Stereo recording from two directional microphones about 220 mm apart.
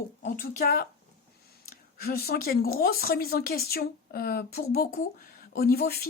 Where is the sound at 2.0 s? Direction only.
45° left (ahead or behind).